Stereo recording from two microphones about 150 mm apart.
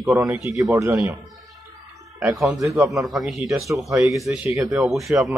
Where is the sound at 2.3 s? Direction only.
Centre (ahead or behind).